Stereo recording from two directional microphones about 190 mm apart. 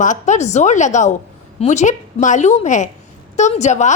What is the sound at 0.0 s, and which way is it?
A woman's voice, 40° left (ahead or behind).